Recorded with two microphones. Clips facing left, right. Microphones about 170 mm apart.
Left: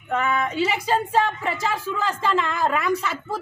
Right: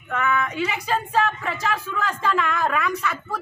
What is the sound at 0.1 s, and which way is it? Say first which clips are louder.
A woman's voice: left 1 dB; 30° left (ahead or behind).